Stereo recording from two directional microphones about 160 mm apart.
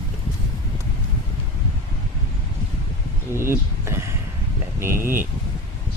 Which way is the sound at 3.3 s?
15° right (ahead or behind).